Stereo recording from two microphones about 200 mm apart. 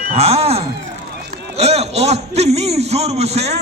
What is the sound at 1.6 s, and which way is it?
A man's voice, 30° right (ahead or behind).